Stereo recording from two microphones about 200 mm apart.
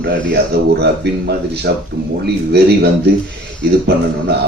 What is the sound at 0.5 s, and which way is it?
Speech, 55° right (ahead or behind).